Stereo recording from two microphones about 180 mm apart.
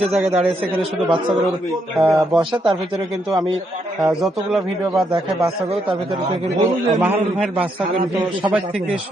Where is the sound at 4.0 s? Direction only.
Centre (ahead or behind).